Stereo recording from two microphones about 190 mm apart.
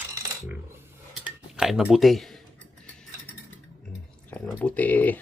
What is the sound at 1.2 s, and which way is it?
Speech, 5° right (ahead or behind).